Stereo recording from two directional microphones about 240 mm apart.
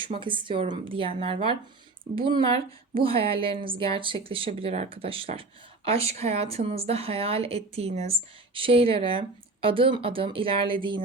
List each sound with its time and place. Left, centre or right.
0.0 s speech: right